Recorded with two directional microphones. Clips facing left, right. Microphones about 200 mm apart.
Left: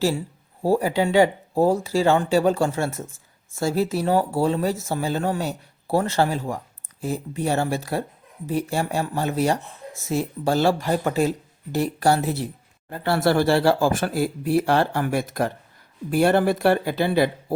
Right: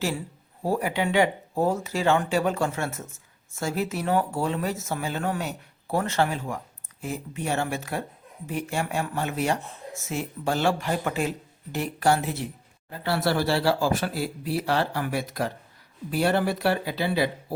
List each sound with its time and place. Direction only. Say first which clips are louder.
0.6 s speech: left 5 dB; 30° left (ahead or behind)
12.9 s speech: left 5 dB; 50° left (ahead or behind)